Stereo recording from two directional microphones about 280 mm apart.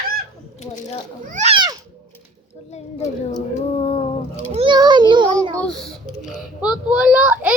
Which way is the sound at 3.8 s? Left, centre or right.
Centre.